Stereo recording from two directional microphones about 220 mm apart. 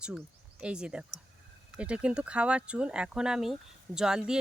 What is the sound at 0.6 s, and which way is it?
Speech, 5° right (ahead or behind).